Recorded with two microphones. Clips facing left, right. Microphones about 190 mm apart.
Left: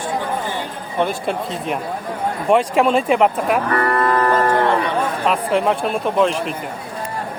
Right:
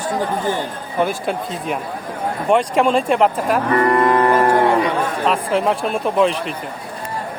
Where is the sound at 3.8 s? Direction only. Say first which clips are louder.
Right 3 dB; 20° right (ahead or behind).